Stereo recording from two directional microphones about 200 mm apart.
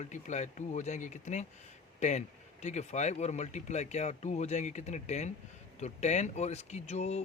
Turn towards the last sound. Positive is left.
turn(degrees=35)  # may be behind; listen again after turning